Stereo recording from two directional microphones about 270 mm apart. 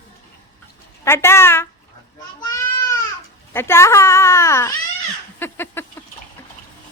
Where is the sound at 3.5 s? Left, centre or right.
Centre.